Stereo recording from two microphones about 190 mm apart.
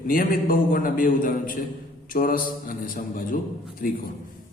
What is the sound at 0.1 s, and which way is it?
A man's voice, 50° left (ahead or behind).